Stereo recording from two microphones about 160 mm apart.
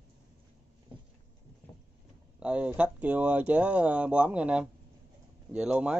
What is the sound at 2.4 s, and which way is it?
Speech, 5° right (ahead or behind).